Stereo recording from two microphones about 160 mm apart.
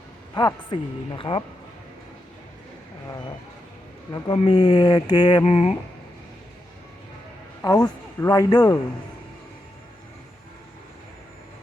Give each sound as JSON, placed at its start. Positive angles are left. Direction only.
{"t": 0.3, "sound": "speech", "side_deg": 30}
{"t": 4.1, "sound": "speech", "side_deg": 25}
{"t": 7.6, "sound": "speech", "side_deg": 25}